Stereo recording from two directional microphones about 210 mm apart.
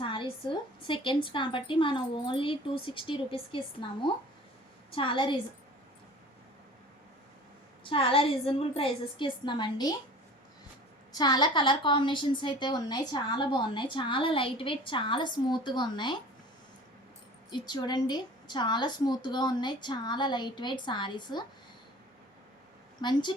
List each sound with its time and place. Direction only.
0.0 s a woman's voice: 25° left (ahead or behind)
7.9 s a woman's voice: 25° left (ahead or behind)
11.1 s a woman's voice: 20° left (ahead or behind)
17.5 s a woman's voice: 20° left (ahead or behind)
23.0 s a woman's voice: 20° left (ahead or behind)